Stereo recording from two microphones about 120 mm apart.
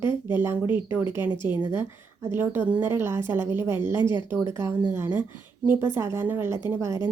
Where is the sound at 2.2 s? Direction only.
20° right (ahead or behind).